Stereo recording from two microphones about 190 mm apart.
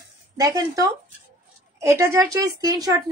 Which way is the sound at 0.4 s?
20° right (ahead or behind).